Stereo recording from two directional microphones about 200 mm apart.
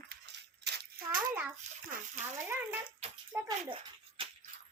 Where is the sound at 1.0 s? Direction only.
50° right (ahead or behind).